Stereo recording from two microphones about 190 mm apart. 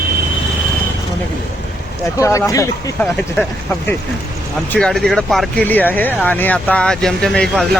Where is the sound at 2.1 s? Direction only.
15° left (ahead or behind).